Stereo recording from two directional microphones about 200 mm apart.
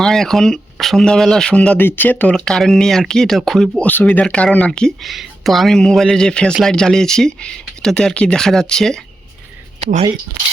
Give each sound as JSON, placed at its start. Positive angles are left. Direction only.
{"t": 0.0, "sound": "speech", "side_deg": 0}
{"t": 9.8, "sound": "speech", "side_deg": -30}